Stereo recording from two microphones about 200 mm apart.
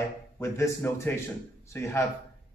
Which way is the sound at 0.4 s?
15° left (ahead or behind).